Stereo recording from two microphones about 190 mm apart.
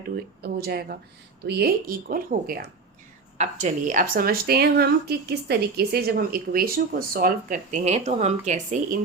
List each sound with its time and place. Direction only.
0.4 s a woman's voice: 55° right (ahead or behind)
3.3 s a woman's voice: 35° right (ahead or behind)